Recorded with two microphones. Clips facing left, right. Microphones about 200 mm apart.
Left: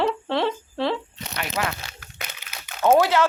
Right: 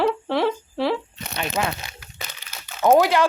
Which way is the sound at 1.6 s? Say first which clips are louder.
Right 2 dB; 20° right (ahead or behind).